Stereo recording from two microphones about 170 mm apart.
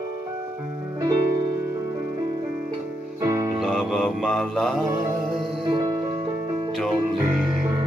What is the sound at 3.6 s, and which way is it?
Music, centre (ahead or behind).